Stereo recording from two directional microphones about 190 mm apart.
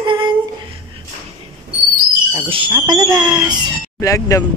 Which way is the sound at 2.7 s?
20° right (ahead or behind).